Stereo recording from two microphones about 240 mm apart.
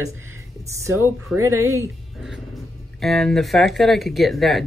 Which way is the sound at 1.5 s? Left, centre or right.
Right.